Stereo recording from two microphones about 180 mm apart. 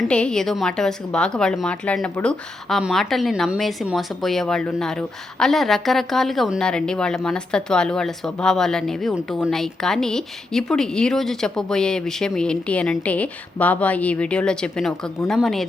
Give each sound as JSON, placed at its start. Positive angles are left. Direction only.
{"t": 0.0, "sound": "a woman's voice", "side_deg": 5}